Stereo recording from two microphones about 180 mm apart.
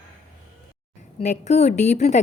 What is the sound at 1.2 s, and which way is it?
A woman's voice, 40° left (ahead or behind).